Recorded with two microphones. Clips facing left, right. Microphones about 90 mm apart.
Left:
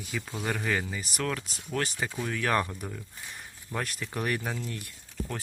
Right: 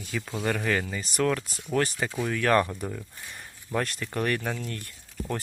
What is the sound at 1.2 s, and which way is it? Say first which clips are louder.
Speech: right 7 dB; centre (ahead or behind).